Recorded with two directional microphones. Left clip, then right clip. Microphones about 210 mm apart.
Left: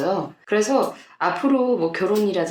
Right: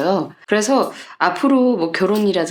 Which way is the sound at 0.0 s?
45° right (ahead or behind).